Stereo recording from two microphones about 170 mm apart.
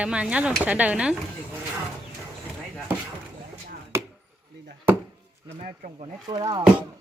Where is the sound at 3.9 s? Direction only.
15° right (ahead or behind).